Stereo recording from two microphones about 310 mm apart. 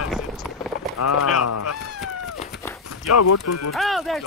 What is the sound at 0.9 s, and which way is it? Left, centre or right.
Speech, left.